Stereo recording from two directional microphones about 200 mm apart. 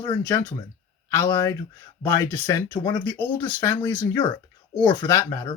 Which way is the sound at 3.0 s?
10° left (ahead or behind).